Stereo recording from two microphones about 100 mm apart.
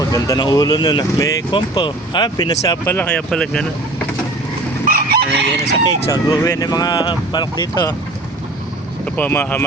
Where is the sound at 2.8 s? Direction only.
25° left (ahead or behind).